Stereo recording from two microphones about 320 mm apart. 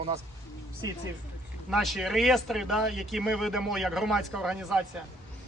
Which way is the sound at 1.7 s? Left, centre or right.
Centre.